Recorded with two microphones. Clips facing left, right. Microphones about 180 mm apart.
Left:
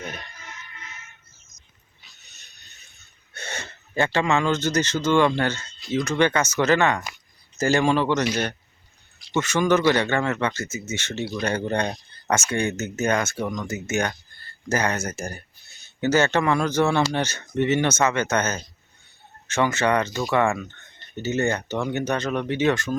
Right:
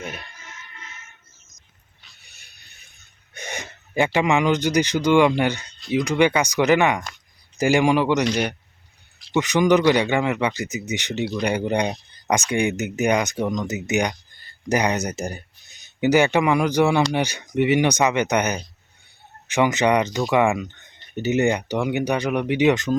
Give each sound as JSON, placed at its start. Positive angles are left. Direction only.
{"t": 2.2, "sound": "music", "side_deg": -10}
{"t": 3.3, "sound": "speech", "side_deg": -15}
{"t": 9.4, "sound": "speech", "side_deg": -15}